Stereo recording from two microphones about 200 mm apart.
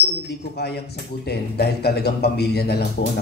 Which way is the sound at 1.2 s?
55° left (ahead or behind).